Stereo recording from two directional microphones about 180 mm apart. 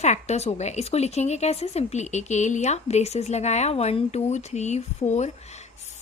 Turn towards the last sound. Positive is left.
turn(degrees=40)  # may be behind; listen again after turning